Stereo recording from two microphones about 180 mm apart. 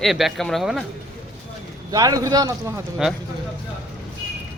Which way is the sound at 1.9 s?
20° right (ahead or behind).